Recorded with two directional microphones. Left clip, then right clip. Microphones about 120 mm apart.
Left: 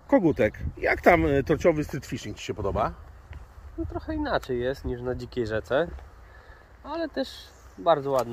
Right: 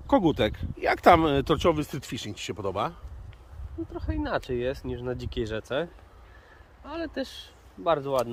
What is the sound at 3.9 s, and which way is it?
Speech, 15° right (ahead or behind).